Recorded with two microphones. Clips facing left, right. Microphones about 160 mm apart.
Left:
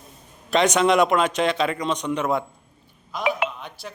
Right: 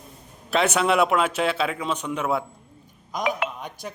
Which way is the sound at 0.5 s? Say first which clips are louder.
Left 3 dB; 5° right (ahead or behind).